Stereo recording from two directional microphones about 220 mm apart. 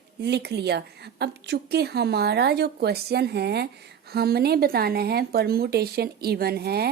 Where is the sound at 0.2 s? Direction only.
50° right (ahead or behind).